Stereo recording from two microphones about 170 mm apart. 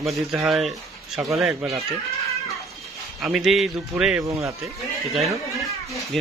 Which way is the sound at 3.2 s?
Centre (ahead or behind).